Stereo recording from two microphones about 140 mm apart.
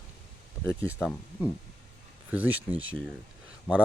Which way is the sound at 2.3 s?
10° right (ahead or behind).